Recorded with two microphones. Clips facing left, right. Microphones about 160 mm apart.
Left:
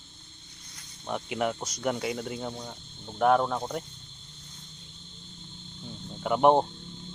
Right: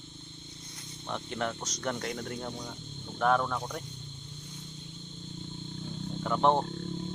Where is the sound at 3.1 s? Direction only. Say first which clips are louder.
Left 4 dB; 20° left (ahead or behind).